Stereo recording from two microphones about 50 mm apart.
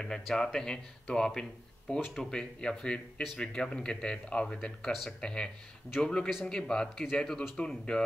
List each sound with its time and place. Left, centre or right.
0.0 s speech: centre